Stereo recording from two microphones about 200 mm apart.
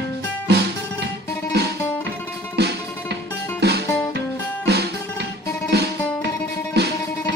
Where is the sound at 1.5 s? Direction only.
55° right (ahead or behind).